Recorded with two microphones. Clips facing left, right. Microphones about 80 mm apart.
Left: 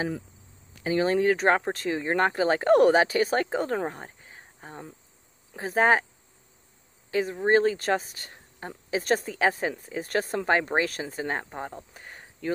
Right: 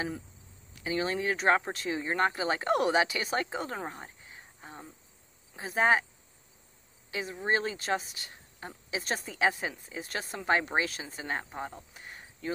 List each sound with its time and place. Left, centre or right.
0.8 s speech: left
7.1 s speech: left